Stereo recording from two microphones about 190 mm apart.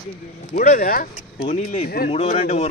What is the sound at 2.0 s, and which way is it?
Speech, 35° left (ahead or behind).